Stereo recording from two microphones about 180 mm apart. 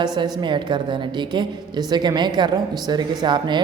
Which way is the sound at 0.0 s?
25° right (ahead or behind).